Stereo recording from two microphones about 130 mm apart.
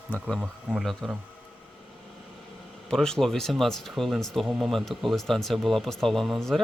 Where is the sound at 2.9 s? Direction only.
5° left (ahead or behind).